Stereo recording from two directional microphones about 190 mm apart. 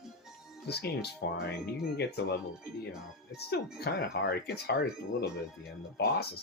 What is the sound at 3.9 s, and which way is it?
Speech, 55° left (ahead or behind).